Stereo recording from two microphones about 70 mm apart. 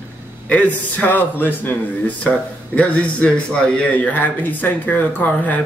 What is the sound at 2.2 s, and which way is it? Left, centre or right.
A man's voice, centre.